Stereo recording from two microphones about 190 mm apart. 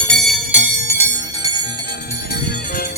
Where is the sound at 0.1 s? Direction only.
Centre (ahead or behind).